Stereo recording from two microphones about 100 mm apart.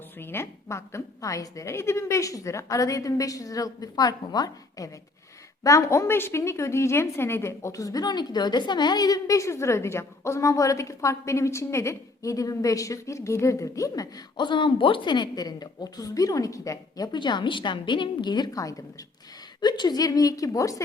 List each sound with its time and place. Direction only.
0.2 s a woman's voice: 25° left (ahead or behind)
19.6 s a woman's voice: 45° left (ahead or behind)